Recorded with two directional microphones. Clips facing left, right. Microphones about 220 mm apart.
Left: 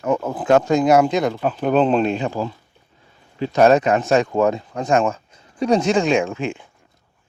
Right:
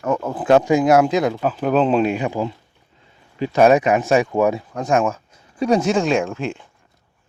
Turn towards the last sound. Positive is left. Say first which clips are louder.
# left 1 dB
turn(degrees=0)  # may be behind; listen again after turning